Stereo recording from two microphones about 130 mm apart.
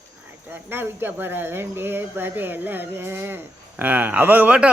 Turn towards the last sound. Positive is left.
turn(degrees=-10)  # may be behind; listen again after turning